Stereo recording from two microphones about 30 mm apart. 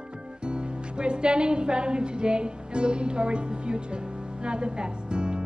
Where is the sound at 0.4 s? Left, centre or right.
Right.